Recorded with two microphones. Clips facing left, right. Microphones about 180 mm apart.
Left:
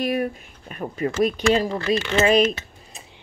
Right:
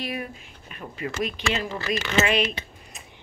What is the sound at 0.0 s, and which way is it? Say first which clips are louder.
Speech: left 9 dB; 45° left (ahead or behind).